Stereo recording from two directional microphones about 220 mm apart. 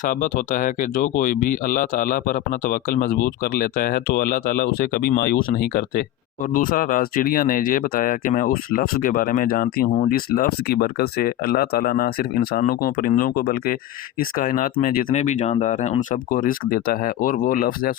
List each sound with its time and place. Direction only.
0.0 s speech: 40° left (ahead or behind)